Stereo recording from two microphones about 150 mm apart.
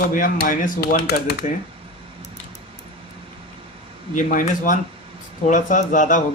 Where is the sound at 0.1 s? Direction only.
65° left (ahead or behind); by 1.3 s 90° left.